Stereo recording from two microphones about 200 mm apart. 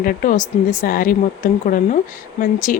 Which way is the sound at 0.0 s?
45° left (ahead or behind).